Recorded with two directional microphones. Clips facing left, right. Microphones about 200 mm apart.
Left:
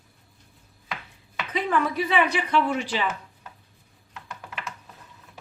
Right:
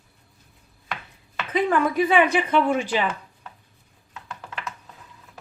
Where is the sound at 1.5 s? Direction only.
50° right (ahead or behind).